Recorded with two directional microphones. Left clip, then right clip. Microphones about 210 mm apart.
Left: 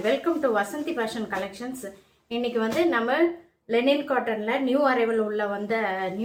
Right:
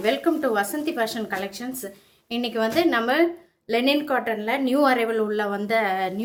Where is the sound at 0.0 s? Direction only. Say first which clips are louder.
Right 1 dB; 45° right (ahead or behind).